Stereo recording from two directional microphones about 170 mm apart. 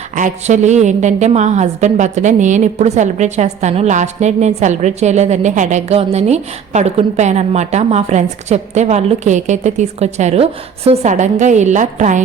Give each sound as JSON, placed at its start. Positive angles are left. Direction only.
{"t": 0.2, "sound": "a woman's voice", "side_deg": -45}